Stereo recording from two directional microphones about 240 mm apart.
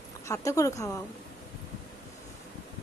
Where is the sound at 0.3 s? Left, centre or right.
Centre.